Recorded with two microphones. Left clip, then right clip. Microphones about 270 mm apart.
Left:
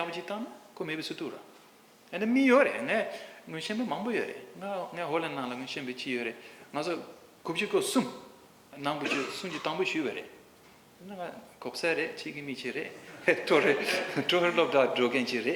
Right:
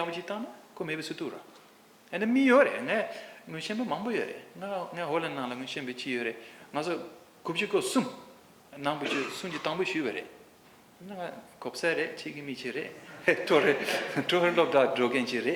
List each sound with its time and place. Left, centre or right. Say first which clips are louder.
0.0 s a man's voice: right 1 dB; right